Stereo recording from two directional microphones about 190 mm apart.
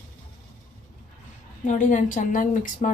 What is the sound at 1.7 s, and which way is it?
A woman's voice, 40° left (ahead or behind).